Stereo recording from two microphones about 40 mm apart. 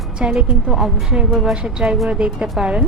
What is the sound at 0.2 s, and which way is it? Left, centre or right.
Speech, right.